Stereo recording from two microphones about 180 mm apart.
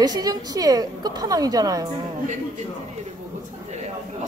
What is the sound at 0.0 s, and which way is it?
A woman's voice, 20° right (ahead or behind).